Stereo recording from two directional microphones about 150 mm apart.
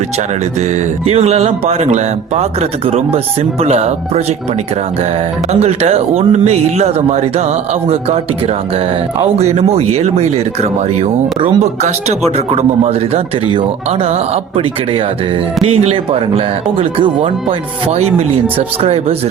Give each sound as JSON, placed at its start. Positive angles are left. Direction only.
{"t": 0.6, "sound": "speech", "side_deg": -45}
{"t": 5.5, "sound": "speech", "side_deg": -45}
{"t": 11.3, "sound": "a man's voice", "side_deg": -30}
{"t": 11.6, "sound": "a man's voice", "side_deg": -45}